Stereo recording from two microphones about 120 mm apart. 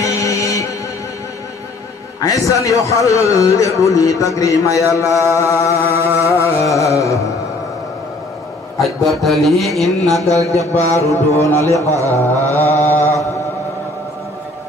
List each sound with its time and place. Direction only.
0.0 s music: 25° left (ahead or behind)
2.1 s a man's voice: 30° left (ahead or behind)
5.9 s carnatic music: 15° right (ahead or behind)
6.2 s carnatic music: 25° left (ahead or behind)
8.7 s a man's voice: centre (ahead or behind)
10.1 s speech: 25° right (ahead or behind)
10.7 s music: 65° left (ahead or behind)
11.1 s a man's voice: 20° left (ahead or behind)
12.4 s mantra: 20° left (ahead or behind)